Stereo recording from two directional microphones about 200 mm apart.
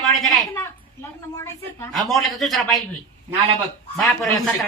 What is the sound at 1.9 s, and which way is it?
Speech, centre (ahead or behind).